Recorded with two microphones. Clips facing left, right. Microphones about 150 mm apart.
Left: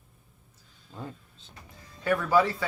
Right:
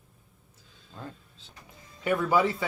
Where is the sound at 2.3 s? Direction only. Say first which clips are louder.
Left 2 dB; 20° right (ahead or behind).